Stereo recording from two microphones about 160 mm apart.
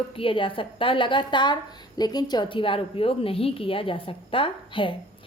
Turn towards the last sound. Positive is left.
turn(degrees=35)  # may be behind; listen again after turning